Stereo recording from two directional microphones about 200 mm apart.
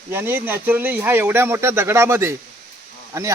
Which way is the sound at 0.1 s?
10° right (ahead or behind).